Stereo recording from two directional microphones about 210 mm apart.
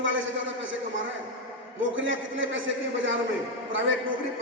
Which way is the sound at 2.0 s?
65° right (ahead or behind).